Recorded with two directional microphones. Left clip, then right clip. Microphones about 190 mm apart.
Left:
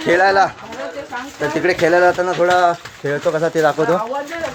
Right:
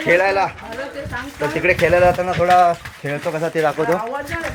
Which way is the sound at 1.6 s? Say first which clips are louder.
Even; 10° left (ahead or behind).